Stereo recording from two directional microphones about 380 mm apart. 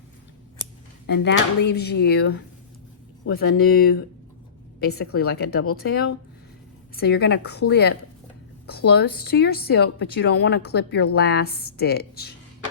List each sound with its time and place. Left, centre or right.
1.0 s a woman's voice: left